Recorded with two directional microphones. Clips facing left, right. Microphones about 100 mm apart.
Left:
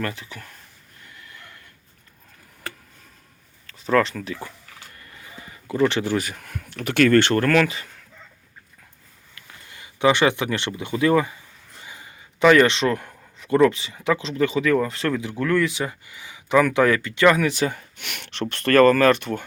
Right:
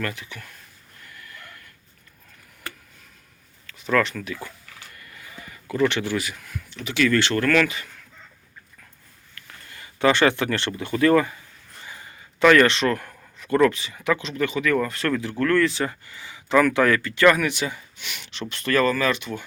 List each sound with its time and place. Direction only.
0.0 s speech: 30° left (ahead or behind)
1.0 s a sound: 25° left (ahead or behind)
3.7 s a sound: 35° left (ahead or behind)
7.4 s speech: 30° left (ahead or behind)
9.3 s speech: 20° left (ahead or behind)
17.7 s speech: 55° left (ahead or behind)